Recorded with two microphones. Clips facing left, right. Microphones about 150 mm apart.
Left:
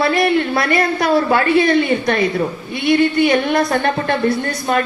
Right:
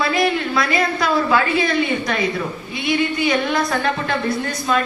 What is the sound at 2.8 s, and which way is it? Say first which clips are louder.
A woman's voice: left 6 dB; 60° left (ahead or behind).